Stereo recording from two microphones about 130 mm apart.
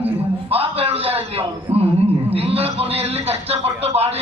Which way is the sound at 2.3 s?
50° right (ahead or behind).